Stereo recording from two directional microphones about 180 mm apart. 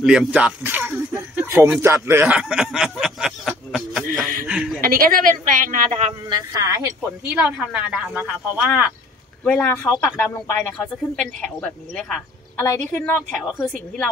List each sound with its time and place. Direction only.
0.0 s speech: 5° right (ahead or behind)
4.5 s chuckle: 10° right (ahead or behind)
4.8 s speech: 55° right (ahead or behind)
6.2 s a woman's voice: 20° right (ahead or behind); by 8.9 s 5° right (ahead or behind)
9.4 s speech: 10° left (ahead or behind)
11.4 s speech: 5° left (ahead or behind)
13.4 s speech: 5° right (ahead or behind)